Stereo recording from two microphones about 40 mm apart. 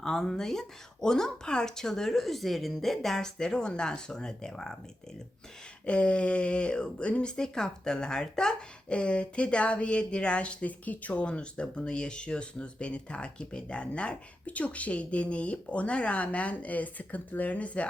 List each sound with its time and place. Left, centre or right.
0.0 s speech: centre
5.8 s speech: left
8.9 s speech: left